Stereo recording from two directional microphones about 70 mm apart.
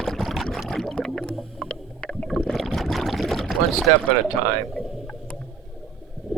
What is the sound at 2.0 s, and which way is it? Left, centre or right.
Rowboat, centre.